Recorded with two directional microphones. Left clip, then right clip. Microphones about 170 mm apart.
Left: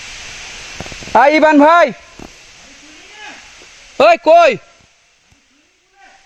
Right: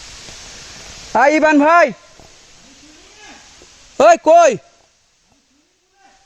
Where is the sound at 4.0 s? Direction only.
10° right (ahead or behind).